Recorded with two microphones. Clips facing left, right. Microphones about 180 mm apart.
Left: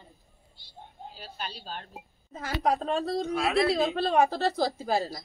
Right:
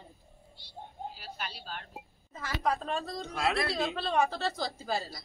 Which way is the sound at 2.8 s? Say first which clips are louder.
Left 6 dB; 70° left (ahead or behind).